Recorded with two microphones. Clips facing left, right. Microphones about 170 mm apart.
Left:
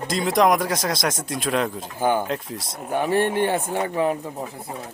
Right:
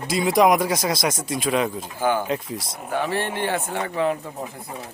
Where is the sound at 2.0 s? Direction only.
15° left (ahead or behind).